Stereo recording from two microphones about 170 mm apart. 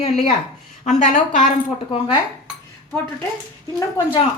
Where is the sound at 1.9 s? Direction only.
30° left (ahead or behind).